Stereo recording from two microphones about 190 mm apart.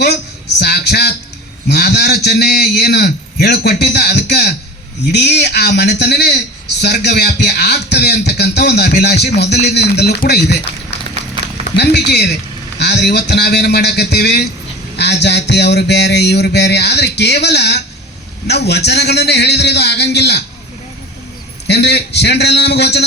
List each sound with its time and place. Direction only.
0.6 s a sound: 60° left (ahead or behind)
1.6 s a man's voice: 60° left (ahead or behind)
11.6 s a man's voice: 60° left (ahead or behind)
21.7 s a man's voice: 60° left (ahead or behind)